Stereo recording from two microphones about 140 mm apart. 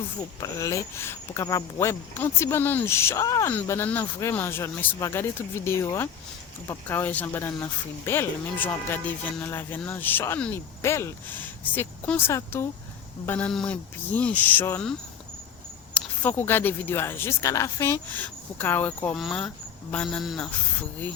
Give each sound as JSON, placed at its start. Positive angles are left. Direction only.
{"t": 0.3, "sound": "speech", "side_deg": 25}
{"t": 3.5, "sound": "speech", "side_deg": 15}
{"t": 16.0, "sound": "a man's voice", "side_deg": 15}